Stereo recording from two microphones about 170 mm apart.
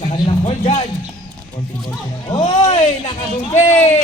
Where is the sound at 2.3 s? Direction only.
40° left (ahead or behind).